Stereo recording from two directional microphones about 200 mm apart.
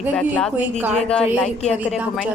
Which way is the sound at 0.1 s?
5° left (ahead or behind).